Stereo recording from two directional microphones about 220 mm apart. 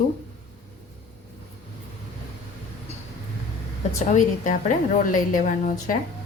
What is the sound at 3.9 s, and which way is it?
A woman's voice, 35° left (ahead or behind).